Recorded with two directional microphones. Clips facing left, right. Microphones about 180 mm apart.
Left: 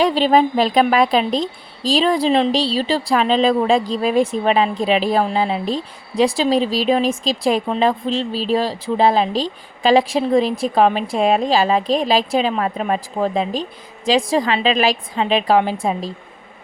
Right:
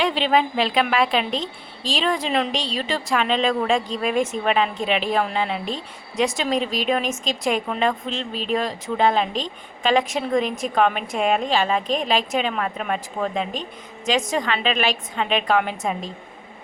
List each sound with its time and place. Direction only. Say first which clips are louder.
0.0 s a woman's voice: left 6 dB; 40° left (ahead or behind)